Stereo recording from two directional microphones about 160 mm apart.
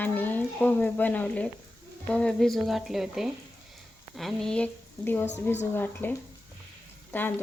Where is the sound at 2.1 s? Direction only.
5° left (ahead or behind).